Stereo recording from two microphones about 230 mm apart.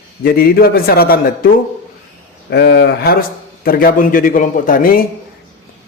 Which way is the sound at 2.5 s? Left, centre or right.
Left.